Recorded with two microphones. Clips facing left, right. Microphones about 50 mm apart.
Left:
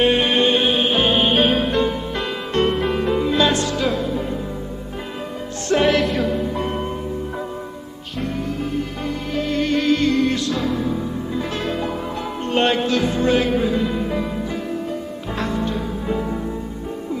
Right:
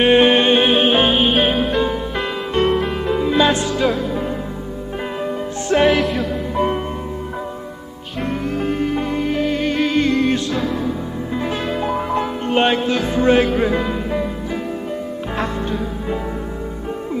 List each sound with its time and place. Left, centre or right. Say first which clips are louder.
0.0 s music: right 4 dB; right
1.1 s music: right 1 dB; centre
5.7 s music: right 2 dB; centre
6.5 s music: right 5 dB; centre
8.2 s music: right 3 dB; right
9.0 s music: right 4 dB; right
9.9 s music: right 2 dB; right
11.3 s music: right 4 dB; centre
11.8 s music: right 5 dB; right